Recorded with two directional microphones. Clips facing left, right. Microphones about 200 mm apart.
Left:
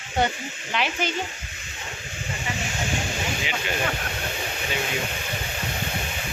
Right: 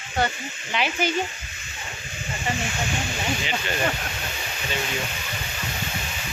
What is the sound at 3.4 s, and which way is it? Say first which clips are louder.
Speech: right 1 dB; 10° left (ahead or behind).